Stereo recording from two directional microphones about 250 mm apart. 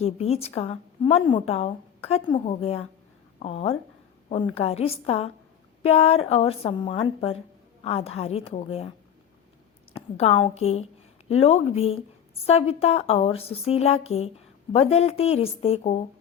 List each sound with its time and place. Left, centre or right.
0.0 s a woman's voice: left
9.9 s a woman's voice: left